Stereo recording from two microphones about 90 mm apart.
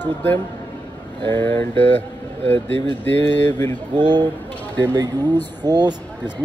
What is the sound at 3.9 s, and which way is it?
Speech, 55° right (ahead or behind).